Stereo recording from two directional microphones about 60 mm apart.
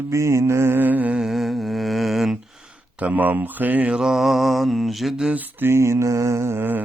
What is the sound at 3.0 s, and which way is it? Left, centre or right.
Speech, right.